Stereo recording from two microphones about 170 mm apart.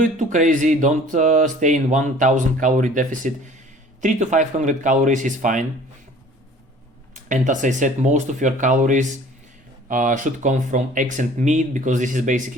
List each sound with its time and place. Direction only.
0.0 s speech: 50° right (ahead or behind)
7.3 s speech: 45° right (ahead or behind)